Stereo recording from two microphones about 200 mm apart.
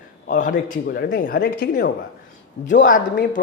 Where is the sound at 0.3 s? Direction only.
40° left (ahead or behind).